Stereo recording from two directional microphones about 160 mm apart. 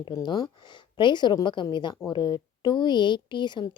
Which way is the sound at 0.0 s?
25° left (ahead or behind).